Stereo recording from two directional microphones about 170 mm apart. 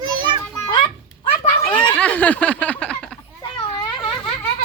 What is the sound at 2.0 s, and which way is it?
Speech, 10° left (ahead or behind).